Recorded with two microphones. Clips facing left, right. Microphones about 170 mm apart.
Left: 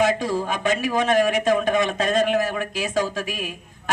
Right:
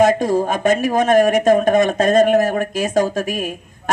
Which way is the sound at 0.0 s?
45° right (ahead or behind).